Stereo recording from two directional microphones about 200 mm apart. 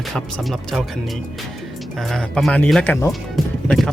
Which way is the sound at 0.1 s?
Centre (ahead or behind).